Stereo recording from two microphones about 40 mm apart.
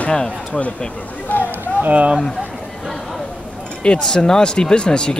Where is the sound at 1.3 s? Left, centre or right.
Left.